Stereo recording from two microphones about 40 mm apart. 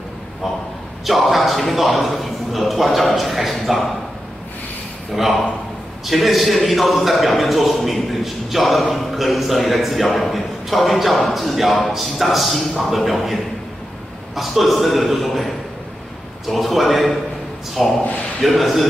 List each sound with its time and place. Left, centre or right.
1.0 s a man's voice: centre
5.1 s a man's voice: centre